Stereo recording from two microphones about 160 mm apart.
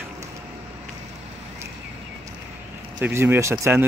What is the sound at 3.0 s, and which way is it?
Speech, 15° right (ahead or behind).